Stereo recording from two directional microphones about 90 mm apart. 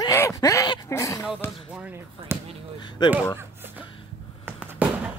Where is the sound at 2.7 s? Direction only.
55° left (ahead or behind).